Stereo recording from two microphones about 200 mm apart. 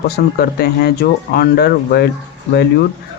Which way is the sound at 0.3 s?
50° left (ahead or behind).